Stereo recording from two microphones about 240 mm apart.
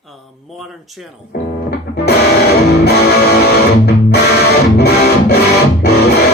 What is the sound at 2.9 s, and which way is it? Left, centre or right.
Music, left.